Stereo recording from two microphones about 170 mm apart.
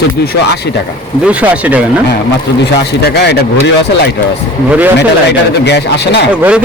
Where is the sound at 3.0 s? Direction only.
80° left.